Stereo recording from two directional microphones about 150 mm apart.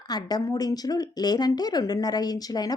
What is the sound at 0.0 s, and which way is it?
A woman's voice, 25° left (ahead or behind).